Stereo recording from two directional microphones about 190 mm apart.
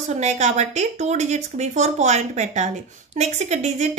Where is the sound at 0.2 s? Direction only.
35° right (ahead or behind).